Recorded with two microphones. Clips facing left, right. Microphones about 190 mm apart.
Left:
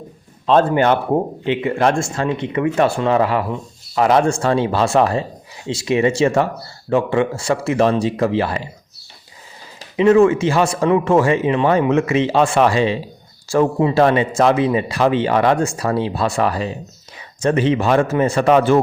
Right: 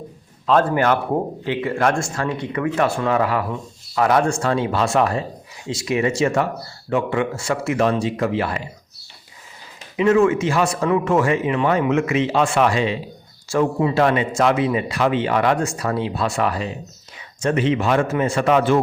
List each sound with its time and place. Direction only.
0.4 s a man's voice: 25° left (ahead or behind)
10.0 s a man's voice: 30° left (ahead or behind)